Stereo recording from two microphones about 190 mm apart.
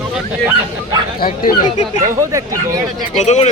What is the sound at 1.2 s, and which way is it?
Speech, 45° left (ahead or behind).